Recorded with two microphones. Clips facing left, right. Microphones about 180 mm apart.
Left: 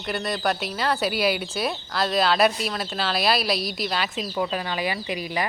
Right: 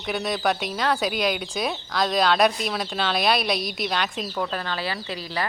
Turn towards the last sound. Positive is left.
turn(degrees=15)  # may be behind; listen again after turning